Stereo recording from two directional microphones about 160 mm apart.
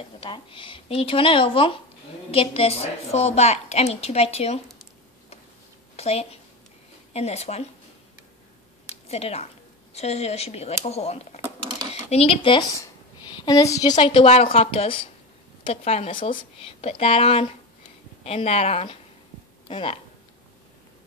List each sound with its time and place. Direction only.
0.2 s a woman's voice: 30° left (ahead or behind)
5.9 s a woman's voice: 40° left (ahead or behind)
9.1 s a woman's voice: 40° left (ahead or behind)